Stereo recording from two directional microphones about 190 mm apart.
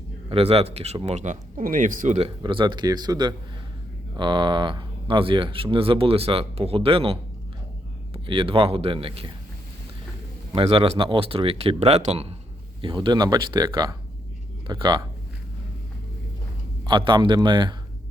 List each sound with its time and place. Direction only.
0.3 s speech: 30° right (ahead or behind)
2.4 s speech: 25° right (ahead or behind)
10.5 s speech: 30° right (ahead or behind)
16.8 s speech: 25° right (ahead or behind)